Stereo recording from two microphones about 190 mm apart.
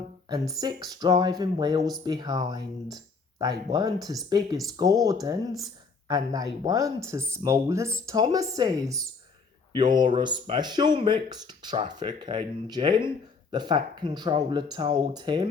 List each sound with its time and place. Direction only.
0.3 s speech: 20° right (ahead or behind)